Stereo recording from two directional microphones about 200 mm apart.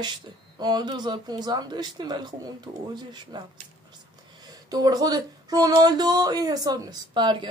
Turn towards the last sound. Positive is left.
turn(degrees=-25)  # may be behind; listen again after turning